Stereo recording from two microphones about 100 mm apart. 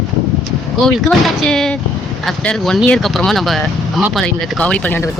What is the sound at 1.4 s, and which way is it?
Speech, 5° left (ahead or behind).